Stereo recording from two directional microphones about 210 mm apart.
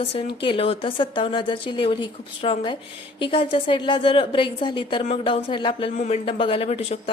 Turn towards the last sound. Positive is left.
turn(degrees=30)  # may be behind; listen again after turning